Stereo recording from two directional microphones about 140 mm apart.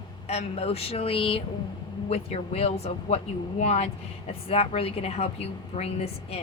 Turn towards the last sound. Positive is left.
turn(degrees=45)  # may be behind; listen again after turning